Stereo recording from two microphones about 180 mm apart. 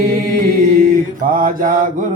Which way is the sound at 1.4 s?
50° right (ahead or behind).